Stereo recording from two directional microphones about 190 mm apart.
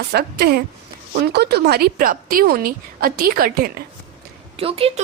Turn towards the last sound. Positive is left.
turn(degrees=-30)  # may be behind; listen again after turning